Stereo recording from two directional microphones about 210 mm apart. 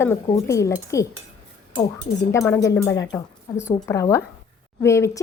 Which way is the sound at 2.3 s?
15° left (ahead or behind).